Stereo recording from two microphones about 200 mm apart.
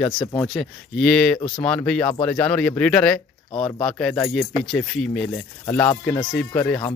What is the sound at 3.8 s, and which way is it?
Speech, centre (ahead or behind).